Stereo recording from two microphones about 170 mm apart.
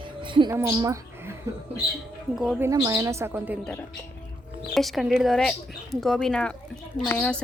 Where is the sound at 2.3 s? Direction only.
Centre (ahead or behind).